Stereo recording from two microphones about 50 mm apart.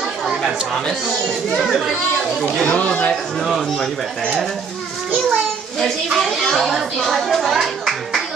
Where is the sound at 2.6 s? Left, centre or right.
Left.